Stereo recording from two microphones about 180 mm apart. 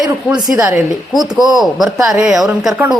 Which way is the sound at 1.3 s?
Centre (ahead or behind).